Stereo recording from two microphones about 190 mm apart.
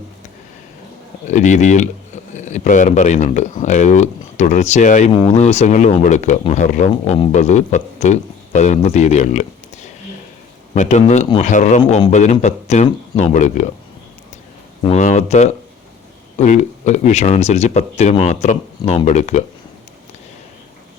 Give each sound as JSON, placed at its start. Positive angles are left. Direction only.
{"t": 1.3, "sound": "speech", "side_deg": 40}
{"t": 6.9, "sound": "speech", "side_deg": 30}
{"t": 10.8, "sound": "speech", "side_deg": 35}
{"t": 14.8, "sound": "speech", "side_deg": 40}